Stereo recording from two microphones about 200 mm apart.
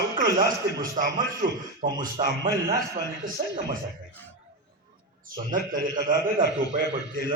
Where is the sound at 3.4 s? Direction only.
35° right (ahead or behind).